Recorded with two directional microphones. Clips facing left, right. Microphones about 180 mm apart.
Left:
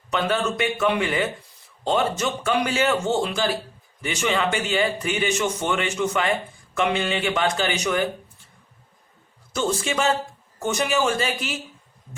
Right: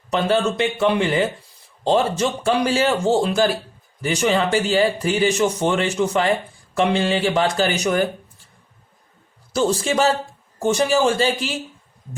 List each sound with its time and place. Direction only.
0.1 s a man's voice: 30° right (ahead or behind)
9.5 s a man's voice: 35° right (ahead or behind)